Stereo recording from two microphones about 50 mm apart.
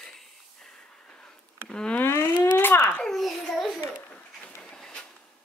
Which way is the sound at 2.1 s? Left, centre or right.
Left.